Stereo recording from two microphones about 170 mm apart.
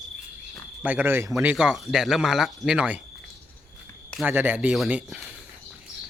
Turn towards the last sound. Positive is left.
turn(degrees=-5)  # may be behind; listen again after turning